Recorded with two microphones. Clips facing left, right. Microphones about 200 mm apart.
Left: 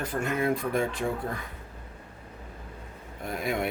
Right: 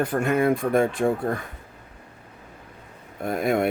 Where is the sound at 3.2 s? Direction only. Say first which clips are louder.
Right 7 dB; 50° right (ahead or behind).